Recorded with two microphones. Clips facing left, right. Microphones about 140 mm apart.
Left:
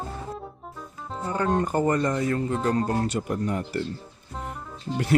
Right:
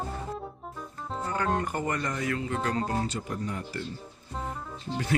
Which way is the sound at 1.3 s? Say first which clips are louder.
Left 5 dB; 20° left (ahead or behind).